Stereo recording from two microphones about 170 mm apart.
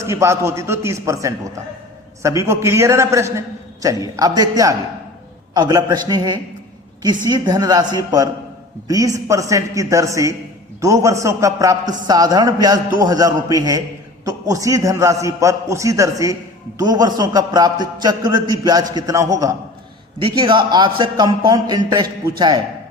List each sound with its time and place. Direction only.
0.0 s a man's voice: 15° right (ahead or behind)